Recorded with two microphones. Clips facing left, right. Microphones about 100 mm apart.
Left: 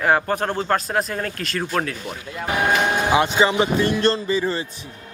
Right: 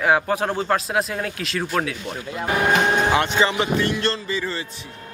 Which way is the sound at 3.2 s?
15° left (ahead or behind).